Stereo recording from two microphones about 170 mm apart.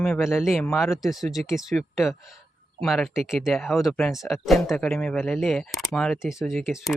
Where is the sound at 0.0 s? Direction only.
Centre (ahead or behind).